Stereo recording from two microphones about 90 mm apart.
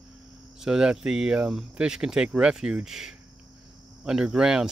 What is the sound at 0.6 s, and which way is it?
Speech, 10° right (ahead or behind).